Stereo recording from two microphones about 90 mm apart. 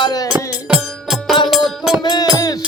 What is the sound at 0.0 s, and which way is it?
Music, 45° left (ahead or behind).